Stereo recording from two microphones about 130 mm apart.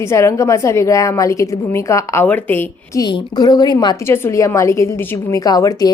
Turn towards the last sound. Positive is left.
turn(degrees=25)  # may be behind; listen again after turning